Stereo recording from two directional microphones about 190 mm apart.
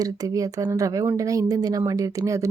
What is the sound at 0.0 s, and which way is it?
Speech, 20° right (ahead or behind).